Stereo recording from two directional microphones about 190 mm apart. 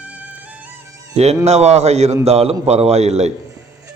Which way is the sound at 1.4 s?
35° right (ahead or behind).